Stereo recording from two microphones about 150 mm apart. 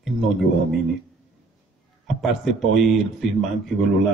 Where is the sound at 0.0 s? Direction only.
Centre (ahead or behind).